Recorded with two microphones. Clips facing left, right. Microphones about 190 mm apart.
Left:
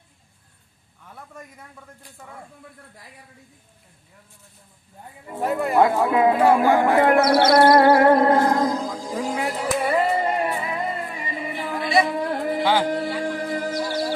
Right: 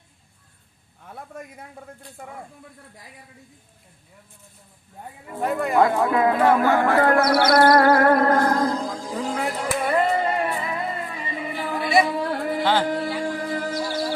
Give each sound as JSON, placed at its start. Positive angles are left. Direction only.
{"t": 5.3, "sound": "speech", "side_deg": 5}
{"t": 6.1, "sound": "music", "side_deg": 20}
{"t": 6.3, "sound": "music", "side_deg": 10}
{"t": 12.1, "sound": "music", "side_deg": 20}
{"t": 12.6, "sound": "speech", "side_deg": 15}
{"t": 13.0, "sound": "music", "side_deg": 0}
{"t": 13.2, "sound": "music", "side_deg": 15}